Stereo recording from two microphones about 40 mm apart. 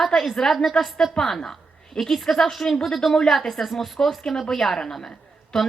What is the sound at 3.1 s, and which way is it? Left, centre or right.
Speech, centre.